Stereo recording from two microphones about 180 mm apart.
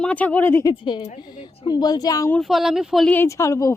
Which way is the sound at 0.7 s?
25° left (ahead or behind).